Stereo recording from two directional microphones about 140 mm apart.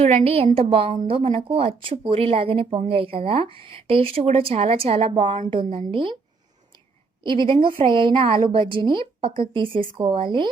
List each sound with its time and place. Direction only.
0.3 s speech: 45° right (ahead or behind)
7.3 s speech: 35° right (ahead or behind)